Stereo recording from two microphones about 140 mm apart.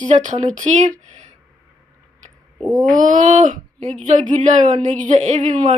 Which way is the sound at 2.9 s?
60° right (ahead or behind).